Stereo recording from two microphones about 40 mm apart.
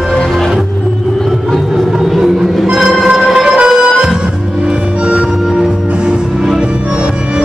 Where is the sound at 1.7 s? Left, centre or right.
Centre.